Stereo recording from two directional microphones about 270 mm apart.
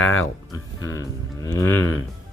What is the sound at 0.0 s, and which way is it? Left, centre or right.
Speech, left.